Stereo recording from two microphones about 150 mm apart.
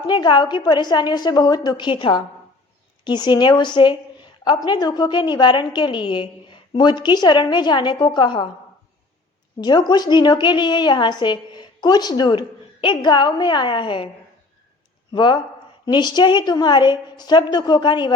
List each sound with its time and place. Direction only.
0.1 s a woman's voice: 30° left (ahead or behind)
9.6 s a woman's voice: 30° left (ahead or behind)
15.1 s a woman's voice: 30° left (ahead or behind)